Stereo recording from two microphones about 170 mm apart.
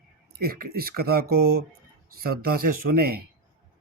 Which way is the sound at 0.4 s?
65° right (ahead or behind).